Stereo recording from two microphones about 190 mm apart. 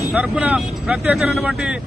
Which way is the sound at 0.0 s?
5° right (ahead or behind).